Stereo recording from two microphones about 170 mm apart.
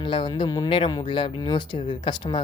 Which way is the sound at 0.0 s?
30° left (ahead or behind).